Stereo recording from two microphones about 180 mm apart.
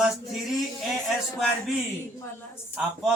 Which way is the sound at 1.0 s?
Centre (ahead or behind).